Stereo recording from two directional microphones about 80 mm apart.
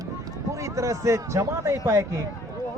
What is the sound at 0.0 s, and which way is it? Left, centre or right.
Speech, right.